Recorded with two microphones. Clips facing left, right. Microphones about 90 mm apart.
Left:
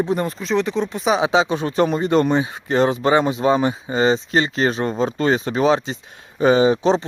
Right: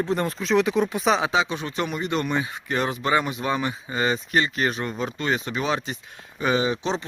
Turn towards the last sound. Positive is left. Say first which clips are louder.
# left 8 dB
turn(degrees=35)  # may be behind; listen again after turning